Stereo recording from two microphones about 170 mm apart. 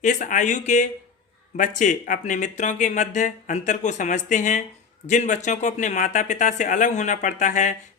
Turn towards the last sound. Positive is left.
turn(degrees=45)  # may be behind; listen again after turning